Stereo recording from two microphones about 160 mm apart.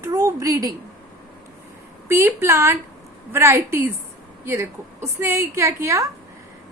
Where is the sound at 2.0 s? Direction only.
15° right (ahead or behind).